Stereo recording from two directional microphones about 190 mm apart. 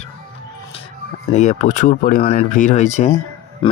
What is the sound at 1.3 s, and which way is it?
Speech, 40° left (ahead or behind).